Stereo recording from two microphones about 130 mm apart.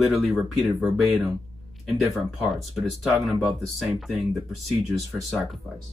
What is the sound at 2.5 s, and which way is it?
Speech, centre (ahead or behind).